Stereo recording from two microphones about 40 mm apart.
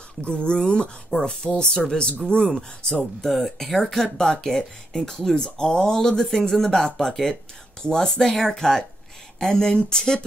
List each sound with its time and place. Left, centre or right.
0.2 s speech: left
3.0 s speech: centre